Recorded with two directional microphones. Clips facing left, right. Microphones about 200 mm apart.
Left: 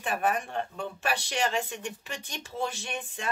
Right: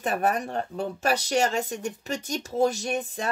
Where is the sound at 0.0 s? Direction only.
40° right (ahead or behind).